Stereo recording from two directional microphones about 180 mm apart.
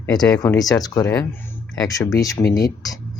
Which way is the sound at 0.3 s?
20° left (ahead or behind).